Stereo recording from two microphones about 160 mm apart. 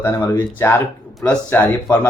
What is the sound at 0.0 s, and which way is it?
Speech, 15° left (ahead or behind).